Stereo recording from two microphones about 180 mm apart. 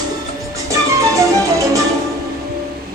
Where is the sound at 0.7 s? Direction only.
15° right (ahead or behind).